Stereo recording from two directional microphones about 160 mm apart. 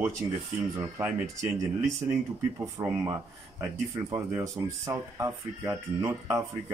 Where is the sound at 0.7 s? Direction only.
20° right (ahead or behind).